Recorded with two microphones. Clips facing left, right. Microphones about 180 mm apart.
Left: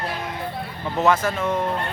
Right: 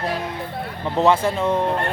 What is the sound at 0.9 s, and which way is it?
Speech, 30° right (ahead or behind).